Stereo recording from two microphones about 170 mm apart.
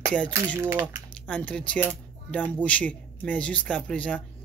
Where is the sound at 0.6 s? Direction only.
15° right (ahead or behind).